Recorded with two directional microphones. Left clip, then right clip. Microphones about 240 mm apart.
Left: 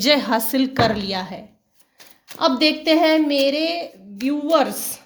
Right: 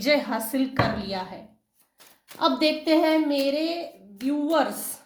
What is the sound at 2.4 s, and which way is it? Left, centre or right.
A woman's voice, left.